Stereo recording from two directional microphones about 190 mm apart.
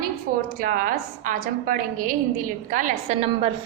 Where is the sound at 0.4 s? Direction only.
50° right (ahead or behind).